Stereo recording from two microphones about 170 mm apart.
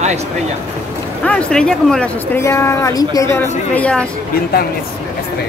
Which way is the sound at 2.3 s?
15° left (ahead or behind).